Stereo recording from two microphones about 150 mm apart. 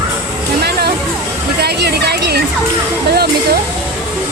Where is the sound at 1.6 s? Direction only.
90° right.